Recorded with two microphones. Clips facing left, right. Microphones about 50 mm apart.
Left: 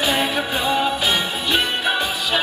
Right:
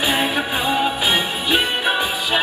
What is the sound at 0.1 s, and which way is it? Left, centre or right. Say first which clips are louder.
Music: right 1 dB; centre.